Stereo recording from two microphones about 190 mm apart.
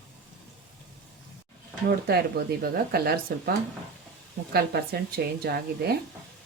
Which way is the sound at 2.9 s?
50° right (ahead or behind).